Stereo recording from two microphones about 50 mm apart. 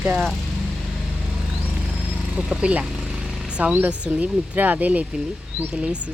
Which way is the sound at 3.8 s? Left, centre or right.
Right.